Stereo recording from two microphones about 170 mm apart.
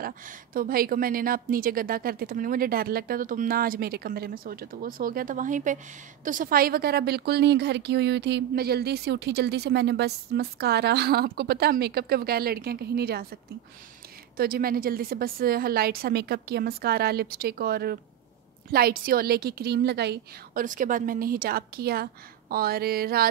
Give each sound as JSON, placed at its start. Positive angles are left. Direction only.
{"t": 0.0, "sound": "a woman's voice", "side_deg": -60}
{"t": 14.3, "sound": "a woman's voice", "side_deg": -60}
{"t": 20.6, "sound": "a woman's voice", "side_deg": -50}